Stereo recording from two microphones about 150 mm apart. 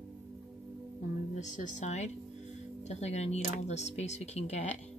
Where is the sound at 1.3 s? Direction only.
55° left (ahead or behind).